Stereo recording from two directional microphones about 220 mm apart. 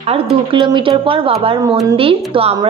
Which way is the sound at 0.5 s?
20° right (ahead or behind).